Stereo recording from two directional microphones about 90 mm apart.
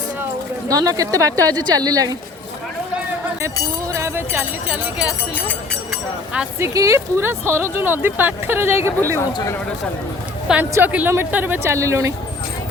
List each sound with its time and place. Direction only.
0.7 s speech: 40° right (ahead or behind)
3.4 s speech: 35° right (ahead or behind)
6.6 s speech: 35° right (ahead or behind)
10.6 s speech: 20° right (ahead or behind)